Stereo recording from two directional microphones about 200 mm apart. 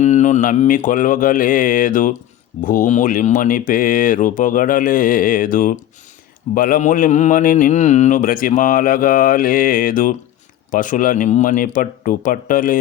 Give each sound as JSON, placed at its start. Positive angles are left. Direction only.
{"t": 0.0, "sound": "speech", "side_deg": 35}